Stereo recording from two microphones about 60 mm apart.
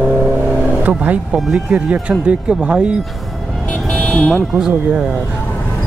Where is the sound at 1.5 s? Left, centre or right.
Centre.